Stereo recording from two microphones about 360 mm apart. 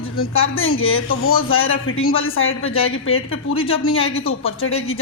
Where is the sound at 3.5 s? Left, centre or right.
Centre.